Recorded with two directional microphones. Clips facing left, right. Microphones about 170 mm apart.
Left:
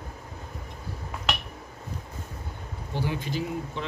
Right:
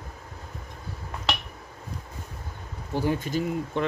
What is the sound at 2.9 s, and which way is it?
Speech, 45° right (ahead or behind).